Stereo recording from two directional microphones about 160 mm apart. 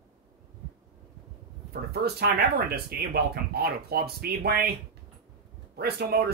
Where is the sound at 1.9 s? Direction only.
90° right.